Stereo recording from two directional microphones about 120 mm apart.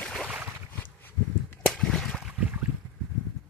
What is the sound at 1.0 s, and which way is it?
Whip, 15° left (ahead or behind).